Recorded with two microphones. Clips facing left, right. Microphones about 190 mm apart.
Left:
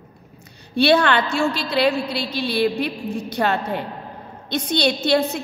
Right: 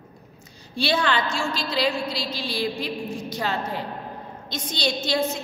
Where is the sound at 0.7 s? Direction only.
60° left (ahead or behind).